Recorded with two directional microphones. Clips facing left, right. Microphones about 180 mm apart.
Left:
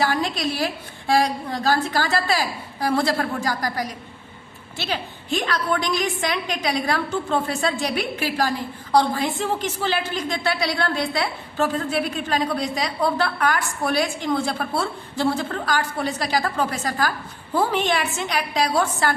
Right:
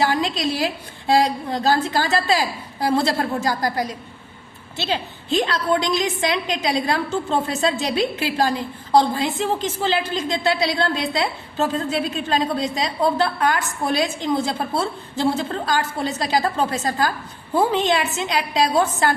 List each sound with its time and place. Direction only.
0.0 s a woman's voice: 20° right (ahead or behind)